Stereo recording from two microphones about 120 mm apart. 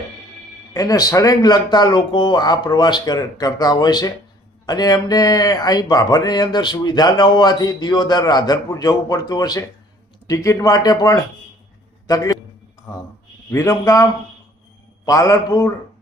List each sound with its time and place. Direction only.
0.7 s speech: 30° left (ahead or behind)
13.5 s speech: 25° left (ahead or behind)